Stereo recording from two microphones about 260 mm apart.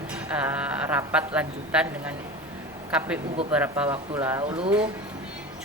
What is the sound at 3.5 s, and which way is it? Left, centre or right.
Speech, centre.